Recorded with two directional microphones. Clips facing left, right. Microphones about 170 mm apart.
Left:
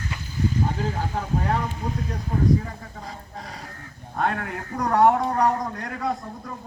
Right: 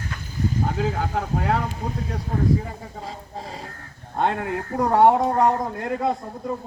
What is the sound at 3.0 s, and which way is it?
A man's voice, 30° right (ahead or behind).